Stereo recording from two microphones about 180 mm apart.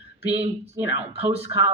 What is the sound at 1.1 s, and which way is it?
Speech, 35° right (ahead or behind).